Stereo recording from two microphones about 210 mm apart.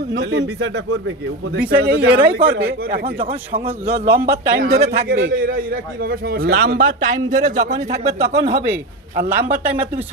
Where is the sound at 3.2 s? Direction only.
25° right (ahead or behind).